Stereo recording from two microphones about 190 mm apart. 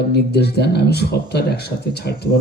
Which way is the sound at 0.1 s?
60° left (ahead or behind).